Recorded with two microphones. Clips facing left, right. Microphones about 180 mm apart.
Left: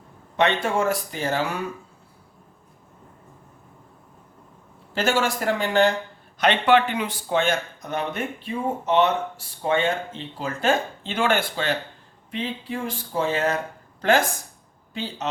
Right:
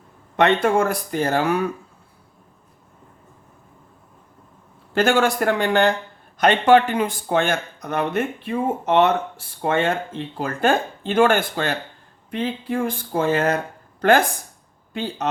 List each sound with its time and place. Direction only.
0.3 s speech: 55° right (ahead or behind)
4.9 s speech: 55° right (ahead or behind)
6.4 s speech: 45° right (ahead or behind)
14.9 s speech: 50° right (ahead or behind)